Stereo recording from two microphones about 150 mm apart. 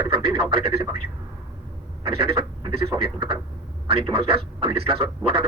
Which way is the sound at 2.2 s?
40° right (ahead or behind).